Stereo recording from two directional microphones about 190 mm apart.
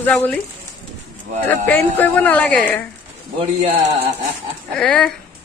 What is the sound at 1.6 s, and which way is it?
Speech, 5° left (ahead or behind).